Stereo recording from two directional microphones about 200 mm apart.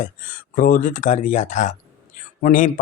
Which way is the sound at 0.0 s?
40° left (ahead or behind).